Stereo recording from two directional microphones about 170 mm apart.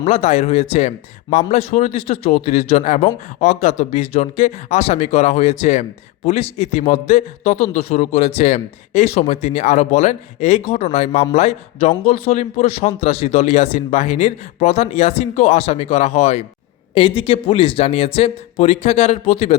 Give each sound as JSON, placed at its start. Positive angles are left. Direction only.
{"t": 0.0, "sound": "speech", "side_deg": 40}